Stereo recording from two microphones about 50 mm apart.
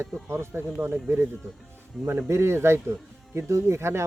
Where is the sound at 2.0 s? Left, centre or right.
Right.